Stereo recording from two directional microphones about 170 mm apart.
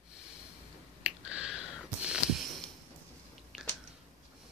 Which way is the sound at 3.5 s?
Centre (ahead or behind).